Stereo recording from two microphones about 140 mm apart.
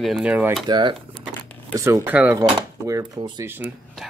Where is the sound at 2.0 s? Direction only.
10° right (ahead or behind).